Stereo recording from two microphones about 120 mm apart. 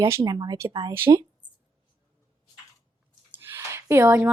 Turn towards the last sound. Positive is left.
turn(degrees=-20)  # may be behind; listen again after turning